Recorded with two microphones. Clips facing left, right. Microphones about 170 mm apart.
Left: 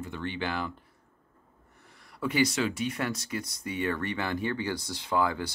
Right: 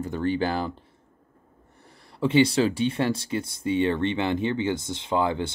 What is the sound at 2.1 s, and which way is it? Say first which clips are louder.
Speech: right 7 dB; 25° right (ahead or behind).